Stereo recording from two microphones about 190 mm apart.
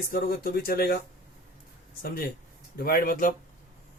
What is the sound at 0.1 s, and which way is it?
Speech, 50° left (ahead or behind).